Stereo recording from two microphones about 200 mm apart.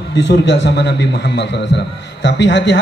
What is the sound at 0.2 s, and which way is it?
A man's voice, 60° left (ahead or behind).